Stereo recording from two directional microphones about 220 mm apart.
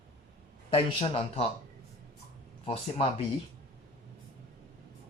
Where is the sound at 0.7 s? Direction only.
25° left (ahead or behind).